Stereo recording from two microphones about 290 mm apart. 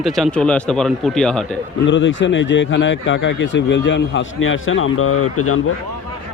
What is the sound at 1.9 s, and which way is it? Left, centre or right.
A man's voice, left.